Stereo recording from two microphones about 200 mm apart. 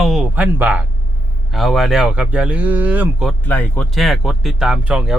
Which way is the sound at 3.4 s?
10° left (ahead or behind).